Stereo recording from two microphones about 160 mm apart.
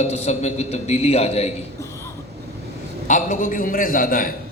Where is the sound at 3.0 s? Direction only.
55° left (ahead or behind).